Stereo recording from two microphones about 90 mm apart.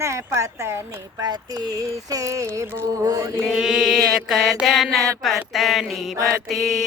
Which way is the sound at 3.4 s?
5° right (ahead or behind).